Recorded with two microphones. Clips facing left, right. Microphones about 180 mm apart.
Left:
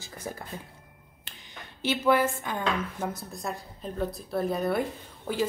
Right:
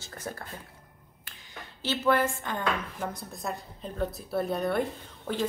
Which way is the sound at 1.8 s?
10° left (ahead or behind).